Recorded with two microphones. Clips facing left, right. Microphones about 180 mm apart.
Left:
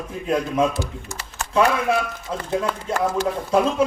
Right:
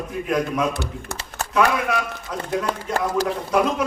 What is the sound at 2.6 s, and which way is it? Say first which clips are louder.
Speech: left 1 dB; 35° right (ahead or behind).